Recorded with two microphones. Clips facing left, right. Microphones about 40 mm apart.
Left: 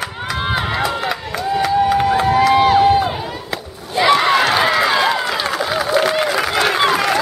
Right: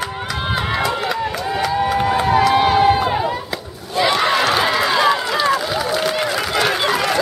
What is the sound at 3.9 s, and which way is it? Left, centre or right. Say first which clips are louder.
Run: left 3 dB; centre.